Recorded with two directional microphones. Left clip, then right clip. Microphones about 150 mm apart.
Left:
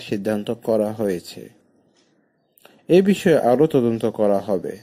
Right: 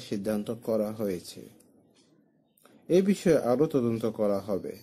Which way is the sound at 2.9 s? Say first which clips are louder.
Left 8 dB; 20° left (ahead or behind).